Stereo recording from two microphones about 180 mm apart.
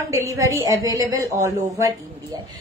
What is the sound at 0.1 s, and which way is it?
A woman's voice, 15° right (ahead or behind).